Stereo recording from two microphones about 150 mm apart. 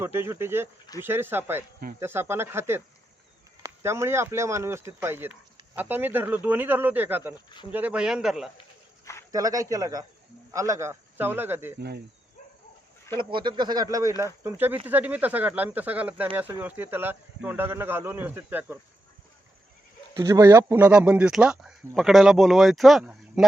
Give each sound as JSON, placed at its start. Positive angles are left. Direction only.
{"t": 0.0, "sound": "speech", "side_deg": -15}
{"t": 9.3, "sound": "speech", "side_deg": -20}
{"t": 13.3, "sound": "speech", "side_deg": -30}
{"t": 20.2, "sound": "speech", "side_deg": -20}